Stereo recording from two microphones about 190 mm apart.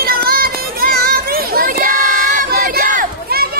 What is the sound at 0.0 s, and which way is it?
Children playing, 50° right (ahead or behind).